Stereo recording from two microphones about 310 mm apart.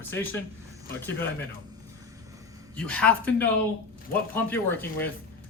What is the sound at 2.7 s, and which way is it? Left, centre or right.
Speech, centre.